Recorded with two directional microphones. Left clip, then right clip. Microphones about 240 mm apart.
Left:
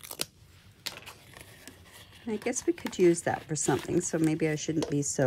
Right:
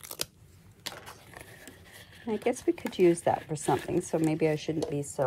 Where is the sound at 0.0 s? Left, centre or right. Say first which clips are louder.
Even; centre.